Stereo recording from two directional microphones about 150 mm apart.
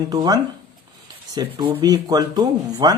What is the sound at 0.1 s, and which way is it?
Speech, 25° right (ahead or behind).